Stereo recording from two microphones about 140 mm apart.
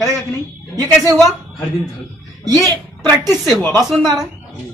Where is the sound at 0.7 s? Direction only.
25° right (ahead or behind).